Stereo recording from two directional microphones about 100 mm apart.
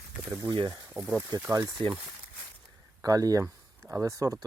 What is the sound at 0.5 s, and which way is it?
Speech, 45° right (ahead or behind).